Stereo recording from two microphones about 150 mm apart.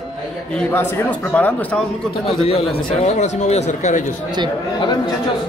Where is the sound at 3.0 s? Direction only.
50° left (ahead or behind).